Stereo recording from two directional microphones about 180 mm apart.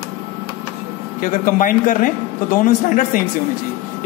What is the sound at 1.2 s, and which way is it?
A man's voice, 50° left (ahead or behind).